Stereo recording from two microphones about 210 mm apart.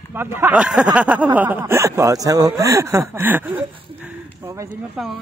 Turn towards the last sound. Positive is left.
turn(degrees=-10)  # may be behind; listen again after turning